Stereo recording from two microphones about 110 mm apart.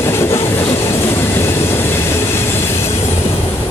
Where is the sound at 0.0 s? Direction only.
25° left (ahead or behind).